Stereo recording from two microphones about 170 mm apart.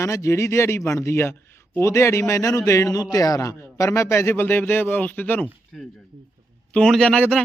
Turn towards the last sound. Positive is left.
turn(degrees=5)  # may be behind; listen again after turning